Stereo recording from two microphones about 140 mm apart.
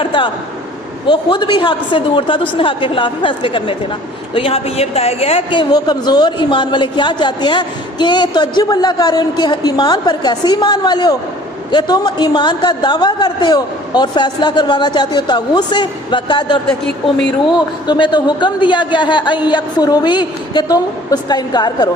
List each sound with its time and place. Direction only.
0.0 s a man's voice: 35° left (ahead or behind)